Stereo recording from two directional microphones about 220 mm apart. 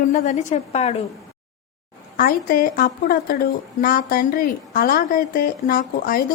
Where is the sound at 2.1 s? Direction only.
40° left (ahead or behind).